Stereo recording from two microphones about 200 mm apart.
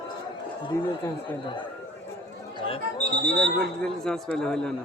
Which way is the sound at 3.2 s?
5° left (ahead or behind).